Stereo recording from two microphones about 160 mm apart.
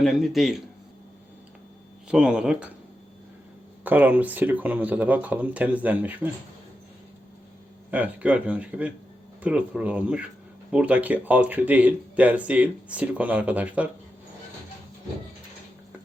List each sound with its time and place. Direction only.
0.0 s a man's voice: centre (ahead or behind)
2.0 s speech: 5° right (ahead or behind)
3.8 s speech: 10° right (ahead or behind)
7.9 s speech: 10° right (ahead or behind)